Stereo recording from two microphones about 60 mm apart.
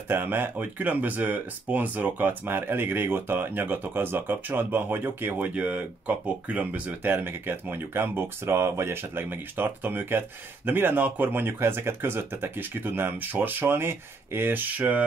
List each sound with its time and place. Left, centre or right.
0.1 s speech: right
5.5 s speech: right
7.0 s speech: right